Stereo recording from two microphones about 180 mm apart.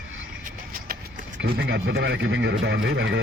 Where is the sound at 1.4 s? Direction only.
70° right (ahead or behind).